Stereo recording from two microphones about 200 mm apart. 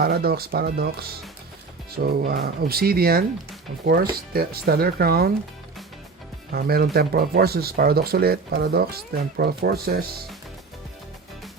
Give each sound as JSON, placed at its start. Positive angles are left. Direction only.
{"t": 0.0, "sound": "speech", "side_deg": -50}
{"t": 6.5, "sound": "speech", "side_deg": -50}